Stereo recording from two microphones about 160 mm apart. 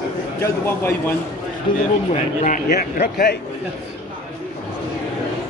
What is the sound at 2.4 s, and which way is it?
Speech, 70° left (ahead or behind).